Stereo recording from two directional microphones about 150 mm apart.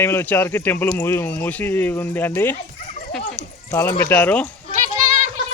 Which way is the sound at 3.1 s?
5° left (ahead or behind).